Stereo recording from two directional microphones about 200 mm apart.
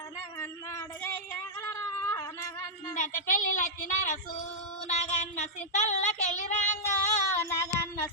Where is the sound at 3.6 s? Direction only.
40° left (ahead or behind).